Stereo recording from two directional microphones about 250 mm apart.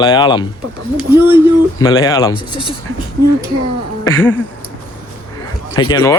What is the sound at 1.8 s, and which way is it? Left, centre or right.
Speech, centre.